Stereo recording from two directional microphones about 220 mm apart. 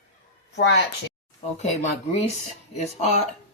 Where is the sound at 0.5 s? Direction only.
50° left (ahead or behind).